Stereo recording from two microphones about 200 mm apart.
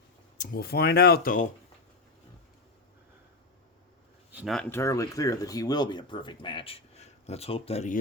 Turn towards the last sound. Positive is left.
turn(degrees=35)  # may be behind; listen again after turning